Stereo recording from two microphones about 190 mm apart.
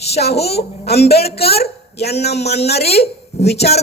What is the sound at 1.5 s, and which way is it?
A woman's voice, 55° left (ahead or behind).